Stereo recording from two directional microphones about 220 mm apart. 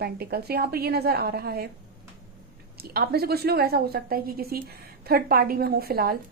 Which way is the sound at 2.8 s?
45° right (ahead or behind).